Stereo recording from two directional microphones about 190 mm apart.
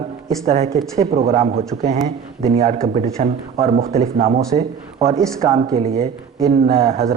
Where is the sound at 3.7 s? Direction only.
50° right (ahead or behind).